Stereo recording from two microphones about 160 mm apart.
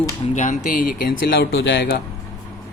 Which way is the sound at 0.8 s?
70° left (ahead or behind).